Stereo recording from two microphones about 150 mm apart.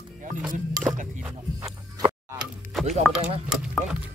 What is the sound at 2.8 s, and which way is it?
Speech, 50° right (ahead or behind).